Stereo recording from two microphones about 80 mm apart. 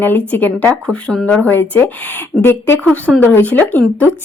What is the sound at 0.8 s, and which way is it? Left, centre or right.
Speech, centre.